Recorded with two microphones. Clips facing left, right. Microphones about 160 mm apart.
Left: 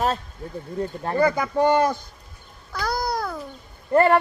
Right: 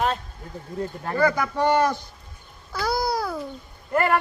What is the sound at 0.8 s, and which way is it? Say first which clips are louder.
Speech: left 1 dB; 30° left (ahead or behind).